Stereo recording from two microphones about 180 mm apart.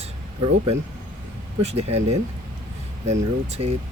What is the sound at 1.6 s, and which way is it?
Speech, 35° right (ahead or behind).